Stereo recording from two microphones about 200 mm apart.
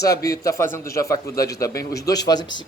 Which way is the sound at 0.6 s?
45° left (ahead or behind).